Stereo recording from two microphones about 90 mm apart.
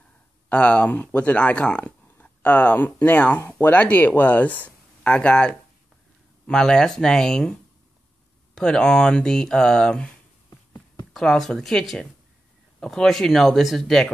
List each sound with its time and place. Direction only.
0.5 s speech: 15° left (ahead or behind)
8.5 s speech: 5° left (ahead or behind)
11.1 s speech: 5° left (ahead or behind)